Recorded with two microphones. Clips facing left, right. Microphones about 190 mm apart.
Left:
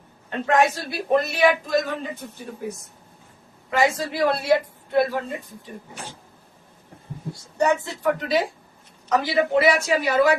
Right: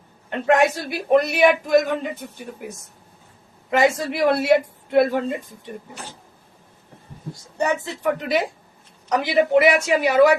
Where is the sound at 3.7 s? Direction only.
20° right (ahead or behind).